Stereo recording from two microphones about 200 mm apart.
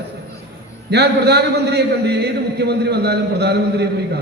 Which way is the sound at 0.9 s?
55° right (ahead or behind).